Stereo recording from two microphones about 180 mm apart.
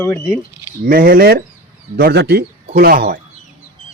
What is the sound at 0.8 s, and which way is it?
Speech, 55° right (ahead or behind).